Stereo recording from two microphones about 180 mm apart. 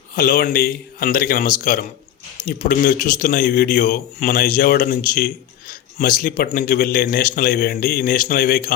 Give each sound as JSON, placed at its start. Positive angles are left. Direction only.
{"t": 0.2, "sound": "a man's voice", "side_deg": 55}